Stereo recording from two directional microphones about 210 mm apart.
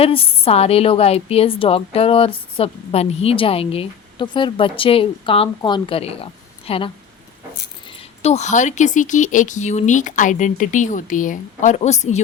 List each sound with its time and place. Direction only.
0.0 s a woman's voice: 25° left (ahead or behind)
8.2 s speech: 30° left (ahead or behind)